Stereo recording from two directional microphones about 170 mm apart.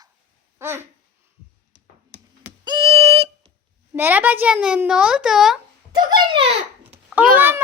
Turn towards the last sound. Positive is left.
turn(degrees=-10)  # may be behind; listen again after turning